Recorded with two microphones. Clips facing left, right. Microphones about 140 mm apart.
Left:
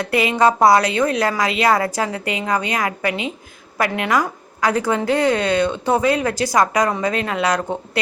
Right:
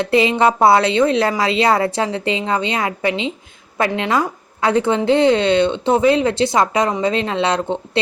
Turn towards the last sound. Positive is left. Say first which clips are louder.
# right 2 dB
turn(degrees=-25)  # may be behind; listen again after turning